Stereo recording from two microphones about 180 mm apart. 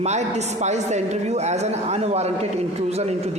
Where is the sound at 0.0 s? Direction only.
40° right (ahead or behind).